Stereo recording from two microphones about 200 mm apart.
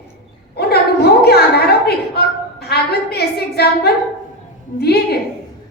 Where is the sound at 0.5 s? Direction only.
55° left (ahead or behind).